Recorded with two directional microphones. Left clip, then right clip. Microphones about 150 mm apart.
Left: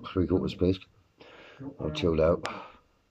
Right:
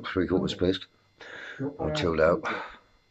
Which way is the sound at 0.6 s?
15° right (ahead or behind).